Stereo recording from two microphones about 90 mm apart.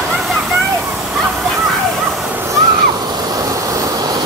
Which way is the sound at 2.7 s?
45° right (ahead or behind).